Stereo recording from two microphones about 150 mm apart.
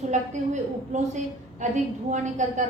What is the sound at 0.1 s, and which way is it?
A woman's voice, 50° right (ahead or behind).